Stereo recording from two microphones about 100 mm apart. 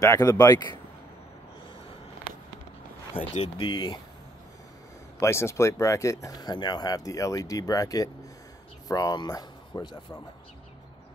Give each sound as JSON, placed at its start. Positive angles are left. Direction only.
{"t": 0.0, "sound": "speech", "side_deg": 35}
{"t": 3.2, "sound": "speech", "side_deg": 60}
{"t": 3.5, "sound": "speech", "side_deg": 50}
{"t": 5.2, "sound": "speech", "side_deg": 30}